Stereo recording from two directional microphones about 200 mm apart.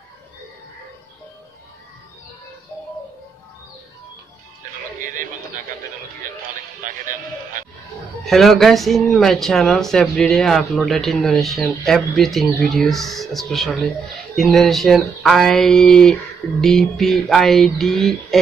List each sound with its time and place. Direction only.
5.0 s a sound: 40° right (ahead or behind)
6.8 s speech: 40° right (ahead or behind)
8.3 s speech: centre (ahead or behind)